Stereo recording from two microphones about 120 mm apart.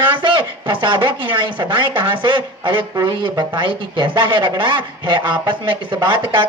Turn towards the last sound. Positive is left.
turn(degrees=-40)  # may be behind; listen again after turning